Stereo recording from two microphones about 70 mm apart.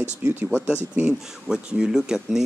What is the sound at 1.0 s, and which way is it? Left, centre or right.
Speech, centre.